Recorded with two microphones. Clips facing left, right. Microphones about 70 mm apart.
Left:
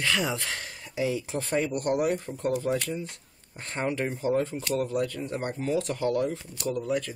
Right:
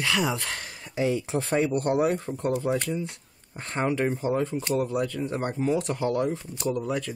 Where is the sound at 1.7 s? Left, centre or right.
Right.